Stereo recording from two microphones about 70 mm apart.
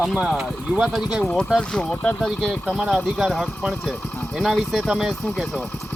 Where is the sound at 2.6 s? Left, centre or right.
Centre.